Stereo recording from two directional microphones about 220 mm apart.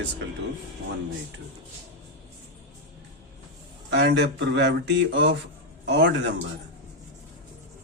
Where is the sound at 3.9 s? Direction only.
50° right (ahead or behind).